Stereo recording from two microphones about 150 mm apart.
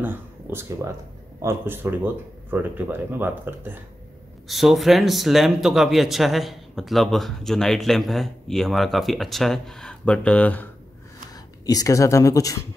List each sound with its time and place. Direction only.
0.0 s speech: 15° right (ahead or behind)
4.5 s speech: centre (ahead or behind)
11.3 s speech: 25° left (ahead or behind)